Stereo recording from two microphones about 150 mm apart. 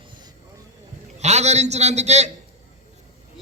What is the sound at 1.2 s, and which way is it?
A man's voice, 50° right (ahead or behind).